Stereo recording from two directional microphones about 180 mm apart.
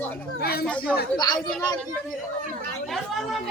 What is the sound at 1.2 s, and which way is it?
Speech, 25° left (ahead or behind).